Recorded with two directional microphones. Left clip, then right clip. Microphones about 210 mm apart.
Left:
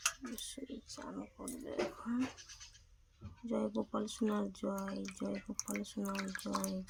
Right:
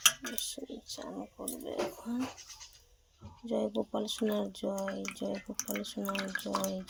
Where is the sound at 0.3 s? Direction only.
35° left (ahead or behind).